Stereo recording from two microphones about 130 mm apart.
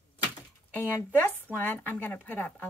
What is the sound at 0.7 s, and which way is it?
A woman's voice, 15° left (ahead or behind).